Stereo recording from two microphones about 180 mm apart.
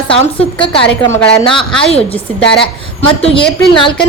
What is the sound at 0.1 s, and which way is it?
Speech, 30° left (ahead or behind).